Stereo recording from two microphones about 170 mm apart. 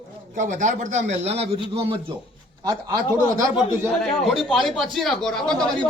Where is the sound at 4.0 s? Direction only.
Centre (ahead or behind).